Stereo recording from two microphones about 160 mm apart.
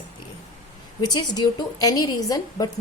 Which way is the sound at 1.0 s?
25° left (ahead or behind).